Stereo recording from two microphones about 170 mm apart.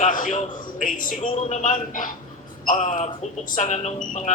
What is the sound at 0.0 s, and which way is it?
Speech, 50° left (ahead or behind).